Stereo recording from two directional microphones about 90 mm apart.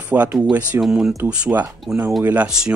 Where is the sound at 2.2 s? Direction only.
20° right (ahead or behind).